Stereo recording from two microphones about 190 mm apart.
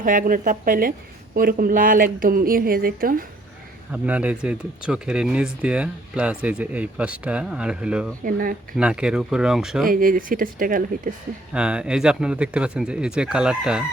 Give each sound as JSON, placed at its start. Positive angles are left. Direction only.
{"t": 0.0, "sound": "a woman's voice", "side_deg": -45}
{"t": 3.9, "sound": "speech", "side_deg": -10}
{"t": 8.2, "sound": "a woman's voice", "side_deg": -45}
{"t": 8.7, "sound": "speech", "side_deg": -5}
{"t": 9.8, "sound": "a woman's voice", "side_deg": -50}
{"t": 11.5, "sound": "speech", "side_deg": -5}